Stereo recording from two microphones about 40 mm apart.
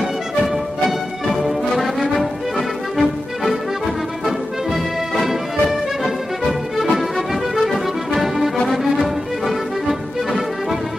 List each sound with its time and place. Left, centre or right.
0.8 s music: centre
5.2 s music: centre